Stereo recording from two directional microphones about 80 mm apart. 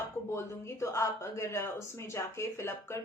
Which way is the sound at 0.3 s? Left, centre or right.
Left.